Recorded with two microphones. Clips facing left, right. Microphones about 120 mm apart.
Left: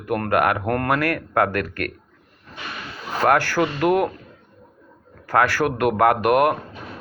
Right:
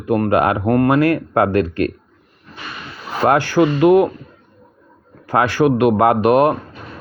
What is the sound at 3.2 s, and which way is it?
Speech, 20° right (ahead or behind).